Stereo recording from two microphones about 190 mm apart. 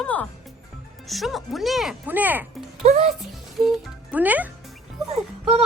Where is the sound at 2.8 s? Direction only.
35° right (ahead or behind).